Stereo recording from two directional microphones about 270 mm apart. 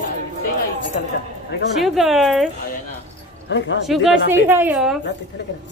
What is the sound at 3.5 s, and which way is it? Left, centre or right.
Speech, left.